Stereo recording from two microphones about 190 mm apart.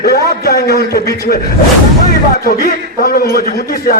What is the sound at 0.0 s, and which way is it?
A man's voice, 55° left (ahead or behind).